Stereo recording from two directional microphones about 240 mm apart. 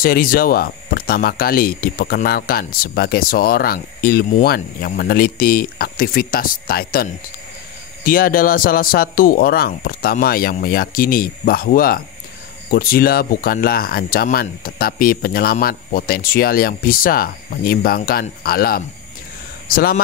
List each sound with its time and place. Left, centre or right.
0.0 s speech: left